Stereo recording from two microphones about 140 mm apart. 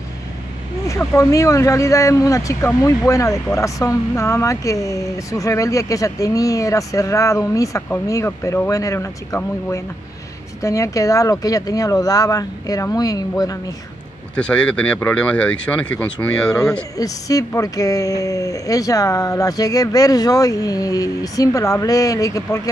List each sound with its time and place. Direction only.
0.8 s speech: 25° left (ahead or behind)
14.3 s speech: 10° left (ahead or behind)
16.9 s speech: 25° left (ahead or behind)